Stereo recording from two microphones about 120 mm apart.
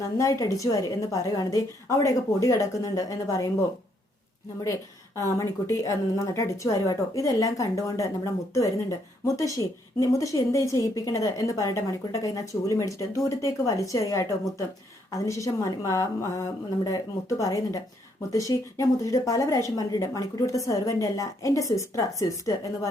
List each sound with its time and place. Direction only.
0.2 s speech: 25° left (ahead or behind)
5.4 s speech: 25° left (ahead or behind)